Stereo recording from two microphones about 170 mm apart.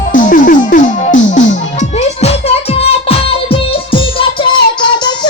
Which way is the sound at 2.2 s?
35° left (ahead or behind).